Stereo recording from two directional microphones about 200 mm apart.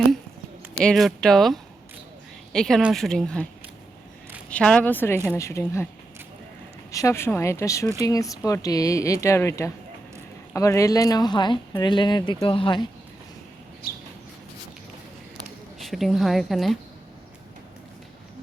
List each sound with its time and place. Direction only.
0.8 s speech: 5° left (ahead or behind)
4.4 s speech: 5° left (ahead or behind)
6.9 s speech: 15° left (ahead or behind)
13.8 s a sound: 50° left (ahead or behind)
15.8 s speech: centre (ahead or behind)